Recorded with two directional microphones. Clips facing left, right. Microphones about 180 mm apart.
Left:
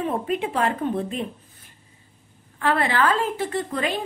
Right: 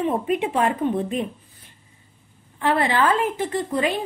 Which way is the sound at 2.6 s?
20° right (ahead or behind).